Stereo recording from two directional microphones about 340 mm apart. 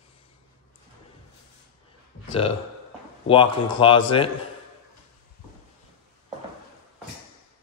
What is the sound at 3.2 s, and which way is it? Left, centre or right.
Speech, centre.